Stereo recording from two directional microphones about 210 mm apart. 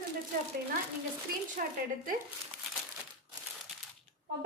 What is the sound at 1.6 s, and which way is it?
Speech, 40° right (ahead or behind).